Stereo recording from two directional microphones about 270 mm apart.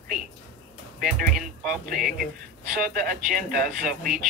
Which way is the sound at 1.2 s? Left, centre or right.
Right.